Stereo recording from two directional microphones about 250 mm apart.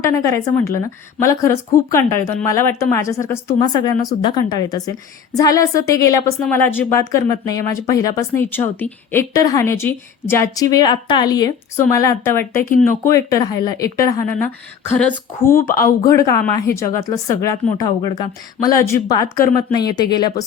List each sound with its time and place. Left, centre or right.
0.0 s a woman's voice: centre
12.6 s speech: left
13.1 s a woman's voice: centre
15.5 s speech: left
16.0 s a woman's voice: centre